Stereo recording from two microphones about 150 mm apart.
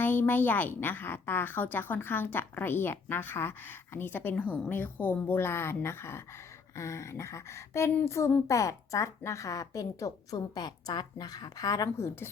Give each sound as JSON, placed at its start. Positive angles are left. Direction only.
{"t": 0.0, "sound": "a woman's voice", "side_deg": 15}